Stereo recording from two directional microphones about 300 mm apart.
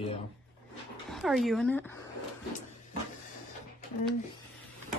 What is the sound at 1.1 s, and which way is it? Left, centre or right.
Speech, centre.